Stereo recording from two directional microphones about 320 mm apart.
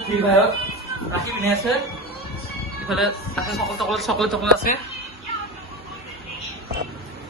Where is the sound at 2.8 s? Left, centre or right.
Centre.